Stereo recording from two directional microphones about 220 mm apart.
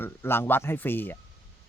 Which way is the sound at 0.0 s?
10° left (ahead or behind).